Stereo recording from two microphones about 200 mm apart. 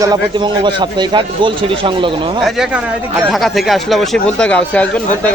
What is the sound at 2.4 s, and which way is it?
Speech, 5° right (ahead or behind).